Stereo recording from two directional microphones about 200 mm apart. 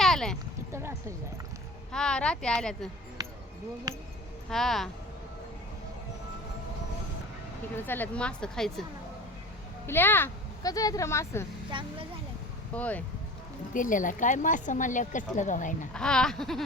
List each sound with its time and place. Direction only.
0.0 s a sound: centre (ahead or behind)
0.7 s a sound: 15° right (ahead or behind)
1.9 s speech: 5° left (ahead or behind)
3.2 s a sound: 20° right (ahead or behind)
4.4 s speech: centre (ahead or behind)
7.8 s speech: 10° left (ahead or behind)
9.8 s speech: 10° left (ahead or behind)
11.7 s a woman's voice: 25° right (ahead or behind)
12.7 s speech: 5° left (ahead or behind)
13.7 s speech: 40° left (ahead or behind)
15.9 s speech: 5° left (ahead or behind)